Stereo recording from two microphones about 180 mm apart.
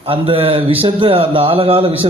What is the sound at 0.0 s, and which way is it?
A man's voice, 30° right (ahead or behind).